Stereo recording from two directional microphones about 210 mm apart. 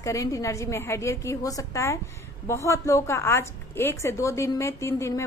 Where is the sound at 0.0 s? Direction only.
15° left (ahead or behind).